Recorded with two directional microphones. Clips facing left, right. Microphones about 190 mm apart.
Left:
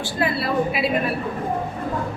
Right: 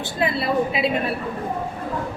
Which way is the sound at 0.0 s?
20° right (ahead or behind).